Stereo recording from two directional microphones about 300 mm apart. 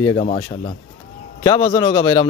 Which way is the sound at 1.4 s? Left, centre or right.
Centre.